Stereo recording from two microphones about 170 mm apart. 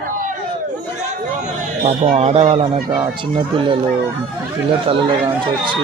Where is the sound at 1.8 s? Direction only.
45° right (ahead or behind).